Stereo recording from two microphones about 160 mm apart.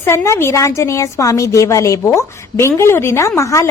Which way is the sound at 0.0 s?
15° left (ahead or behind).